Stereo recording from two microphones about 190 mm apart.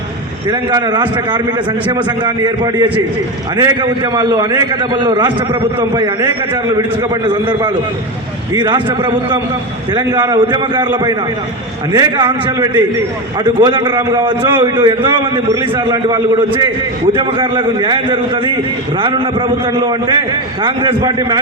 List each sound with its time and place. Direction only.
0.5 s a man's voice: 25° right (ahead or behind)